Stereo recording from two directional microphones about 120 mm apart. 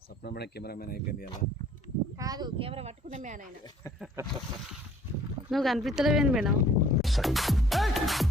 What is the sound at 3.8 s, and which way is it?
Speech, 25° left (ahead or behind).